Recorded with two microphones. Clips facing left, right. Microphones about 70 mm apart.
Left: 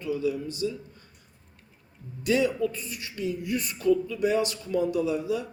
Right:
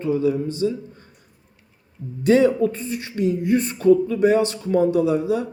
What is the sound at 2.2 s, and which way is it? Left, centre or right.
A man's voice, right.